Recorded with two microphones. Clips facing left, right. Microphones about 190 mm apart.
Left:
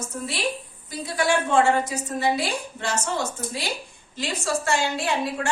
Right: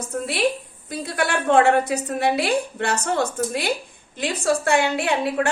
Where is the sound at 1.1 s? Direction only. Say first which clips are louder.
Right 2 dB; 60° right (ahead or behind).